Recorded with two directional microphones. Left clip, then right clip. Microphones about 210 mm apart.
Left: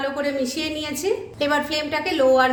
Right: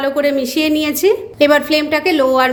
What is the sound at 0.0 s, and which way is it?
A woman's voice, 45° right (ahead or behind).